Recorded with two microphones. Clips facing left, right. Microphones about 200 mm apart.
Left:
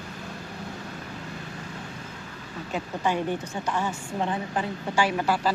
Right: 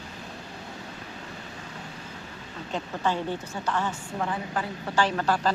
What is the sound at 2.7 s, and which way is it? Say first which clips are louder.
A woman's voice: left 1 dB; 15° left (ahead or behind).